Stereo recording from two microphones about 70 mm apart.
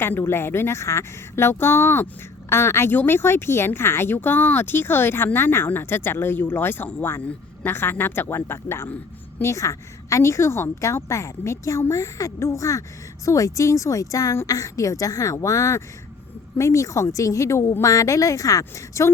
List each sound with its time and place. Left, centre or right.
0.0 s a woman's voice: left